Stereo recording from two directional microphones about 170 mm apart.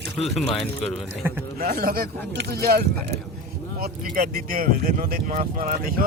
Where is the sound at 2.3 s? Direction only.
80° right.